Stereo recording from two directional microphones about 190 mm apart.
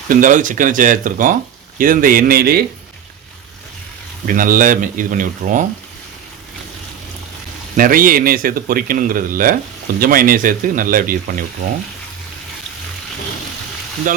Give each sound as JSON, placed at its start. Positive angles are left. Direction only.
{"t": 0.1, "sound": "speech", "side_deg": -45}
{"t": 4.3, "sound": "speech", "side_deg": -45}
{"t": 7.8, "sound": "speech", "side_deg": -50}
{"t": 14.1, "sound": "speech", "side_deg": -45}